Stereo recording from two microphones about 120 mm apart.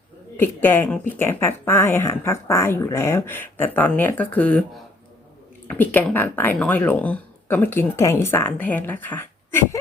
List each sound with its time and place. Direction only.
0.3 s speech: 20° left (ahead or behind)
5.6 s speech: 15° left (ahead or behind)